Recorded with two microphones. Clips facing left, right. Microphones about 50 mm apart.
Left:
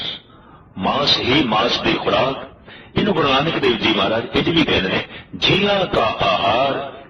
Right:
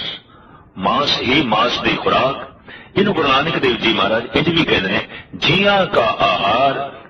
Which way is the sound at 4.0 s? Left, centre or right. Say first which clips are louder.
Right 2 dB; centre.